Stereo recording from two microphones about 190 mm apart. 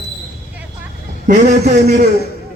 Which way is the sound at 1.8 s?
55° right (ahead or behind).